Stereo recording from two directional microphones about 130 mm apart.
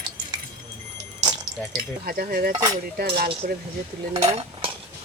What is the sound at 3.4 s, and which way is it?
Speech, 90° right.